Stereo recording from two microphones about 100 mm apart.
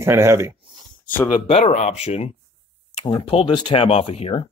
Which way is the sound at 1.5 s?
90° left.